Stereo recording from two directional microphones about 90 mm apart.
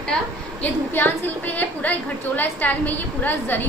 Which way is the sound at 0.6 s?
20° left (ahead or behind).